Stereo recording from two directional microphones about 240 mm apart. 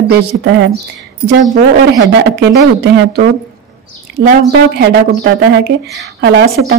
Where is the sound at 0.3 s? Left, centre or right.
Right.